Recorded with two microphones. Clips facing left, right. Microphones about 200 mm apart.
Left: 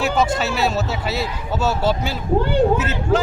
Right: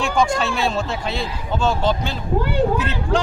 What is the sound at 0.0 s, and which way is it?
Speech, 5° left (ahead or behind).